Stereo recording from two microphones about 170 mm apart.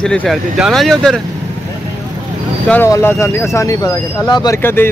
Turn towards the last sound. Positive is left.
turn(degrees=15)  # may be behind; listen again after turning